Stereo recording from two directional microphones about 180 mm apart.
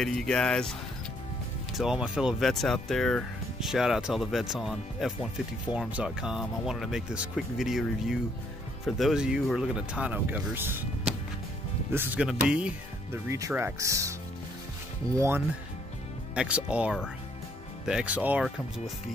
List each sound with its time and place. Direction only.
0.0 s speech: 5° left (ahead or behind)
1.8 s speech: 5° right (ahead or behind)
15.1 s speech: 15° right (ahead or behind)